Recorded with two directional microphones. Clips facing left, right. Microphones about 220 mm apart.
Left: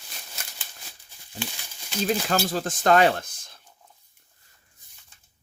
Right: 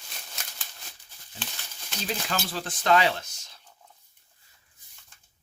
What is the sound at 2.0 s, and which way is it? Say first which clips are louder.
Speech: left 7 dB; 45° left (ahead or behind).